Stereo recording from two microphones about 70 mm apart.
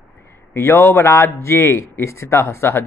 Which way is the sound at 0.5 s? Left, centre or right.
Left.